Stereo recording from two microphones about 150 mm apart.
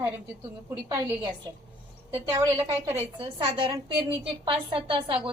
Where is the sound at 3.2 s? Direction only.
35° right (ahead or behind).